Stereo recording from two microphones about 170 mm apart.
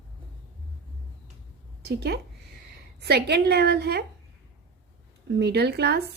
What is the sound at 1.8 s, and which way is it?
A woman's voice, 75° right (ahead or behind).